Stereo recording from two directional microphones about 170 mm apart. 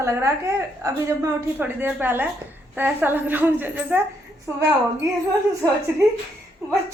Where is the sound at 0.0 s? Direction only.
15° right (ahead or behind).